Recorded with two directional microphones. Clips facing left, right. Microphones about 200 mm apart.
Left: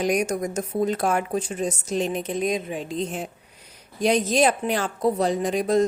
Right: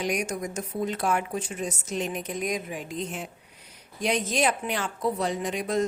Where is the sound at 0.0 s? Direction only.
40° left (ahead or behind).